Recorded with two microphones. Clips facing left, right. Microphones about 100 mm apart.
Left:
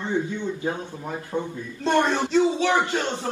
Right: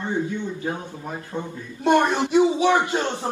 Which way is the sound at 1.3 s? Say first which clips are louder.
Left 3 dB; 20° left (ahead or behind).